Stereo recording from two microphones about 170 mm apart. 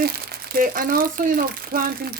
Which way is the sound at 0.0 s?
65° right (ahead or behind).